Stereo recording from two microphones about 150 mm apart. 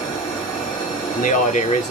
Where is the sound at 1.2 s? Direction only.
55° left (ahead or behind).